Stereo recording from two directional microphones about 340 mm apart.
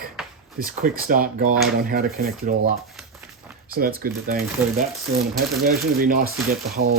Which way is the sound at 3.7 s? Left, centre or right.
Right.